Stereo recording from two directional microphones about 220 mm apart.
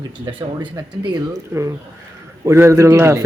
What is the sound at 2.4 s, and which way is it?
Speech, 15° right (ahead or behind).